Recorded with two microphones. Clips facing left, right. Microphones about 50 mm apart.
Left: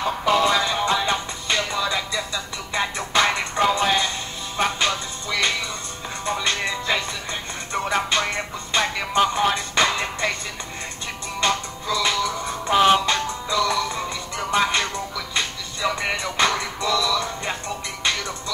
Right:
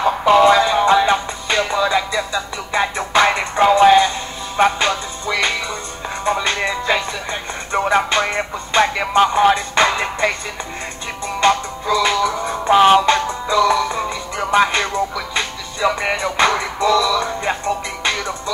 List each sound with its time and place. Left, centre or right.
0.0 s music: right
11.4 s music: centre